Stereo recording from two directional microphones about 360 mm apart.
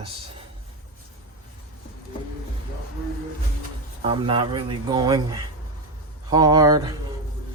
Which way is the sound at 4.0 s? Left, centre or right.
Centre.